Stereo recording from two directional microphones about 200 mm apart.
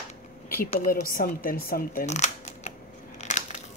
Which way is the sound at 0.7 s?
45° left (ahead or behind).